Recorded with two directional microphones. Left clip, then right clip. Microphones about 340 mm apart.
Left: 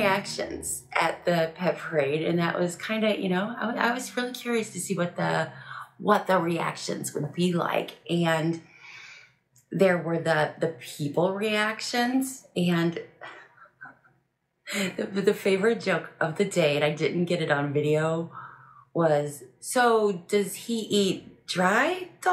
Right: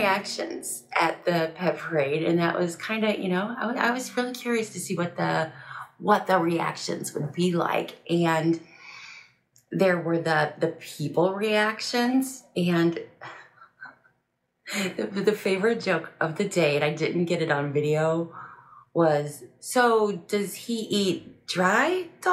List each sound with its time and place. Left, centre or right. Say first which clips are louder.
0.0 s a woman's voice: right 1 dB; centre
14.7 s a woman's voice: right 1 dB; centre